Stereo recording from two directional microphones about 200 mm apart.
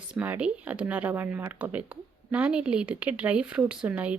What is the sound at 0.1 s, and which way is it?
A woman's voice, 5° right (ahead or behind).